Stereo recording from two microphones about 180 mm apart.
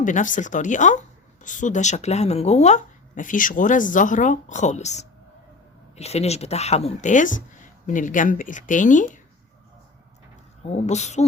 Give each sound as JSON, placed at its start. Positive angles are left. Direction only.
{"t": 0.0, "sound": "speech", "side_deg": 45}
{"t": 10.7, "sound": "speech", "side_deg": 40}